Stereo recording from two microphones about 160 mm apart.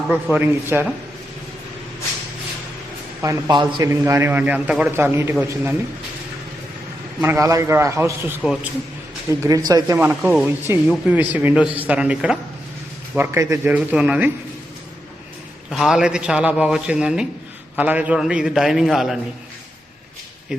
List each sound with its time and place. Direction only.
0.1 s a man's voice: 10° right (ahead or behind)
3.2 s speech: 20° right (ahead or behind)
3.8 s a man's voice: 15° right (ahead or behind)
7.2 s a man's voice: 15° right (ahead or behind)
9.4 s speech: 20° right (ahead or behind)
10.0 s a man's voice: 10° right (ahead or behind)
13.1 s a man's voice: 20° right (ahead or behind)
13.7 s a man's voice: 5° right (ahead or behind)
15.7 s speech: 5° right (ahead or behind)